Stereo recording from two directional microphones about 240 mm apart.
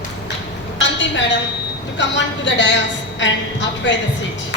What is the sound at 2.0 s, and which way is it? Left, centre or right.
Speech, left.